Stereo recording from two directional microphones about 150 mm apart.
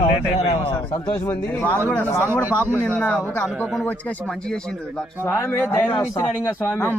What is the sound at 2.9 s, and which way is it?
Speech, 10° left (ahead or behind).